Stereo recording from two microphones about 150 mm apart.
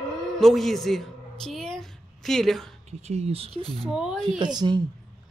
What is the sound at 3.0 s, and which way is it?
Speech, 45° right (ahead or behind).